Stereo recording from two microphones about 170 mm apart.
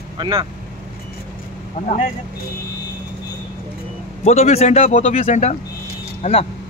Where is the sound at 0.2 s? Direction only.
25° right (ahead or behind).